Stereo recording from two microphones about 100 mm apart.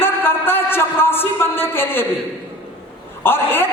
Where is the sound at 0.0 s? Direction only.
20° left (ahead or behind).